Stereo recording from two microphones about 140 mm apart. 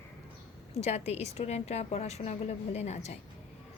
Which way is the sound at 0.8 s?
50° left (ahead or behind).